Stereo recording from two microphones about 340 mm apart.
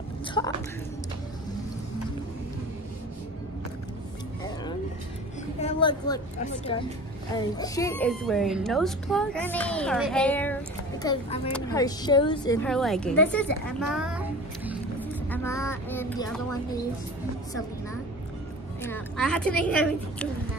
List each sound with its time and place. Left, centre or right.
0.4 s speech: centre
5.6 s a woman's voice: centre
12.6 s a woman's voice: centre
14.7 s a sound: centre
18.8 s a woman's voice: centre